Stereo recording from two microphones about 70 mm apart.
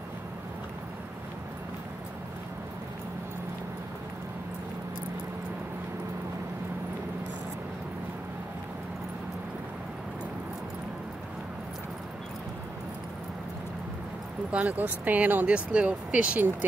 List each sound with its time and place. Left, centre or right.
14.5 s speech: right